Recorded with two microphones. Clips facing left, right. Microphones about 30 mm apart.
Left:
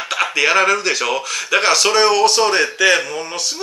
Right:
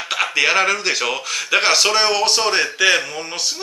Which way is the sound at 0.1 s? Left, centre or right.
Centre.